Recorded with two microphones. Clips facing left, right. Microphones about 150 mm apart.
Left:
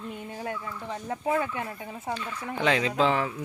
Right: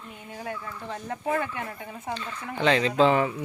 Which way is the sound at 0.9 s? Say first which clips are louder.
Even; 15° left (ahead or behind).